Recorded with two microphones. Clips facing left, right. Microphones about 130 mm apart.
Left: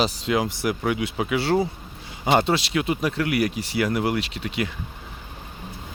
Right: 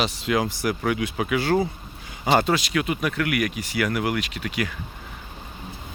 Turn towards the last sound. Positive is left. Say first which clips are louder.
# even
turn(degrees=25)  # may be behind; listen again after turning